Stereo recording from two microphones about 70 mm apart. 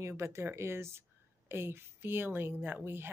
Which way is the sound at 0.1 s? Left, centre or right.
Right.